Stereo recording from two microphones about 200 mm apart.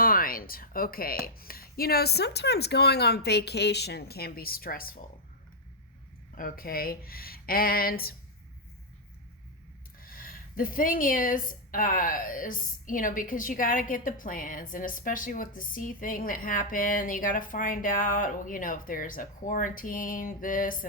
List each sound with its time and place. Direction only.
0.0 s a woman's voice: 45° left (ahead or behind)
6.3 s a woman's voice: 45° left (ahead or behind)
10.0 s a woman's voice: 45° left (ahead or behind)